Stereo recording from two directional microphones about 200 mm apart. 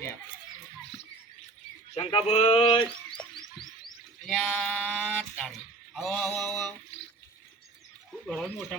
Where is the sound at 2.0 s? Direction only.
30° left (ahead or behind).